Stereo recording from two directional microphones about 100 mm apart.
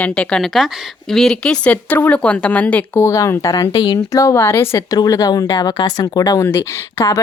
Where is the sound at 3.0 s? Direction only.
30° left (ahead or behind).